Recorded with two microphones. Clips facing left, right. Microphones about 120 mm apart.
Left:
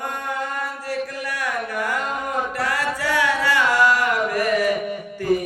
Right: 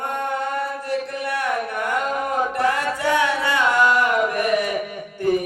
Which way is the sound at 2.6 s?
20° right (ahead or behind).